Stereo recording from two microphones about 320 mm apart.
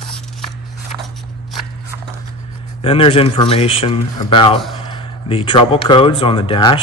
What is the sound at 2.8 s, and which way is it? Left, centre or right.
Speech, centre.